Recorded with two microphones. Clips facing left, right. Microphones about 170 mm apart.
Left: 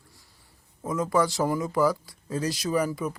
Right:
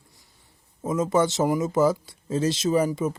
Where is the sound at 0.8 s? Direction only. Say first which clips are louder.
Right 3 dB; 20° right (ahead or behind).